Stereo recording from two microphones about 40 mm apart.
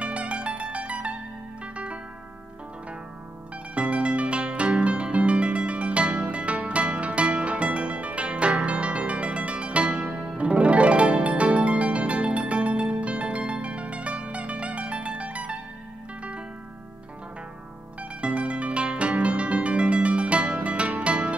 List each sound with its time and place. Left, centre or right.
0.0 s music: right
3.7 s music: right
18.2 s music: right